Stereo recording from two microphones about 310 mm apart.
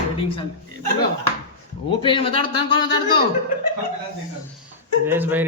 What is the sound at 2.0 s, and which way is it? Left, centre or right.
Speech, centre.